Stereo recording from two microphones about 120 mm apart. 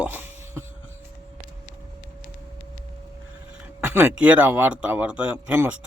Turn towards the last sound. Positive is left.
turn(degrees=-10)  # may be behind; listen again after turning